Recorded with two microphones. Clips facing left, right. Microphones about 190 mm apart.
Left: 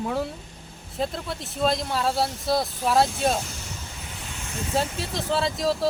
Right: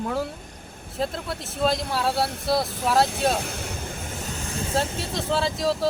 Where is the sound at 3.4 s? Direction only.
55° right (ahead or behind); by 4.5 s 40° right (ahead or behind).